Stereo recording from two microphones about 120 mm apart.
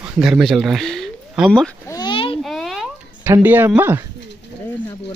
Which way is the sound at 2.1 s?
50° left (ahead or behind).